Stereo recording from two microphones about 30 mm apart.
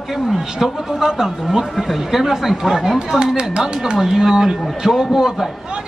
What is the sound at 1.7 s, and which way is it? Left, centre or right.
Speech, centre.